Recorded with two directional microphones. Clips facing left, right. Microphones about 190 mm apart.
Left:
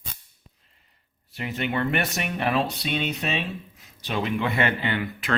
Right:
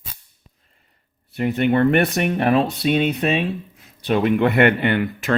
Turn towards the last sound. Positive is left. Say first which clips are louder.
# right 7 dB
turn(degrees=-55)  # may be behind; listen again after turning